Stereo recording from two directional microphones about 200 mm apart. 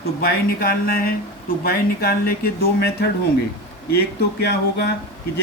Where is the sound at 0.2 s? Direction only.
45° left (ahead or behind).